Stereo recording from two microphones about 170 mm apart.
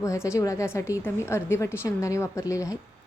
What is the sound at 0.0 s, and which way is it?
A woman's voice, 15° left (ahead or behind).